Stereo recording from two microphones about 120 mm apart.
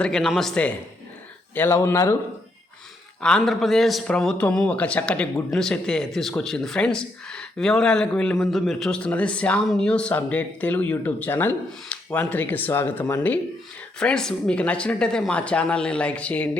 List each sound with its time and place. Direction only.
0.0 s a man's voice: 5° left (ahead or behind)
1.5 s speech: 20° left (ahead or behind)
3.2 s a man's voice: 5° left (ahead or behind)
14.0 s speech: 5° left (ahead or behind)